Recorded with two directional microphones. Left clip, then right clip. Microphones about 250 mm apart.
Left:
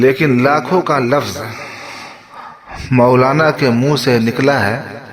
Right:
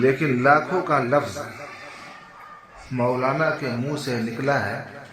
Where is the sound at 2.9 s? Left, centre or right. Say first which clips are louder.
Left 12 dB; left.